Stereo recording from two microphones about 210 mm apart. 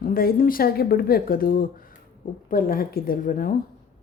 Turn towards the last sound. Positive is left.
turn(degrees=40)  # may be behind; listen again after turning